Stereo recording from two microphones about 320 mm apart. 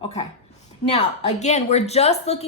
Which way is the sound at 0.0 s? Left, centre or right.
Centre.